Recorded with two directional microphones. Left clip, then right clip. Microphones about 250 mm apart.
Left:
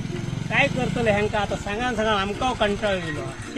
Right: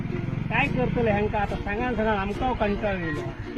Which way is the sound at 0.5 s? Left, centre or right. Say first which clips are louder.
Left 3 dB; left.